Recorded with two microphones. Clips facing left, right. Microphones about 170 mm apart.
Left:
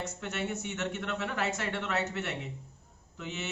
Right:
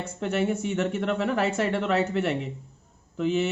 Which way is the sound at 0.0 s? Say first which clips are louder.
Right 9 dB; 30° right (ahead or behind).